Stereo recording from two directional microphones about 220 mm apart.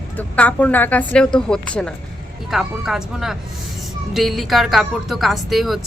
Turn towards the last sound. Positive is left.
turn(degrees=0)  # may be behind; listen again after turning